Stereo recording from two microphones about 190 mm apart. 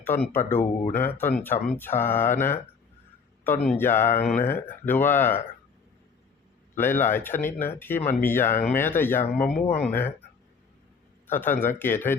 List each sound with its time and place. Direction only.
0.0 s speech: 10° left (ahead or behind)
0.8 s speech: 40° left (ahead or behind)
1.2 s speech: 10° left (ahead or behind)
3.4 s speech: 10° left (ahead or behind)
6.7 s speech: 10° left (ahead or behind)
11.3 s speech: 10° left (ahead or behind)